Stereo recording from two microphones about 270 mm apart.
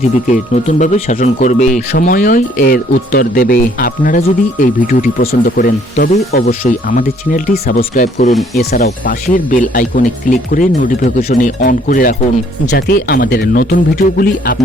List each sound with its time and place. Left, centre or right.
0.1 s speech: left